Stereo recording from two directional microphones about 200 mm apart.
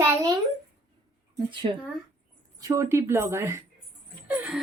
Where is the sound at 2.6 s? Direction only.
15° right (ahead or behind).